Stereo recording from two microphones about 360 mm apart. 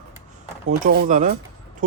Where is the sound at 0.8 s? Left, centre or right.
Right.